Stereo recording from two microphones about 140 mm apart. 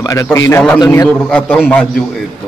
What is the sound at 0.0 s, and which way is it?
A man's voice, 25° left (ahead or behind).